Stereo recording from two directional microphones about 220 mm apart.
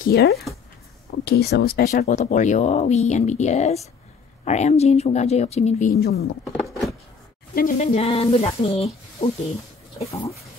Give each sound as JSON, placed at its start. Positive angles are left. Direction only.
{"t": 0.0, "sound": "speech", "side_deg": 45}
{"t": 5.9, "sound": "speech", "side_deg": 45}
{"t": 6.4, "sound": "a sound", "side_deg": 0}
{"t": 7.5, "sound": "speech", "side_deg": 35}